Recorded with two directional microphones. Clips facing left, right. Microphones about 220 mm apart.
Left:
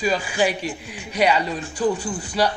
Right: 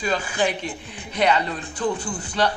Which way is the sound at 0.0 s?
10° left (ahead or behind).